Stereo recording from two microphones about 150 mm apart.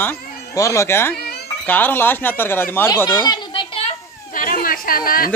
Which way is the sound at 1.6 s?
10° left (ahead or behind).